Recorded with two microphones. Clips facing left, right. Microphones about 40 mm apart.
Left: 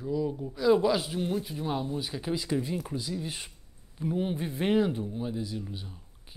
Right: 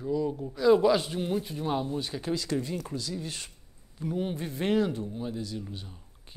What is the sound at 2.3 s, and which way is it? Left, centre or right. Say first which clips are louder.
A man's voice: left 1 dB; centre.